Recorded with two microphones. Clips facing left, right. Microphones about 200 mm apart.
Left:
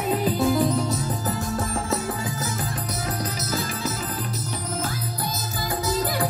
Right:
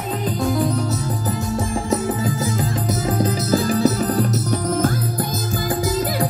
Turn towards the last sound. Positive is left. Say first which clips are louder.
# right 10 dB
turn(degrees=-50)  # may be behind; listen again after turning